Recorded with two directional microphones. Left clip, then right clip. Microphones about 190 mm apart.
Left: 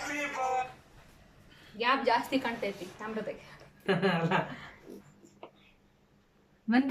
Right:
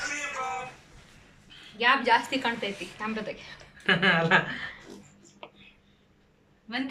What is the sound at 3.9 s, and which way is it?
Speech, 15° left (ahead or behind).